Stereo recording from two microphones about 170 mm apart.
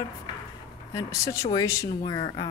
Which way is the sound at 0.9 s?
20° left (ahead or behind).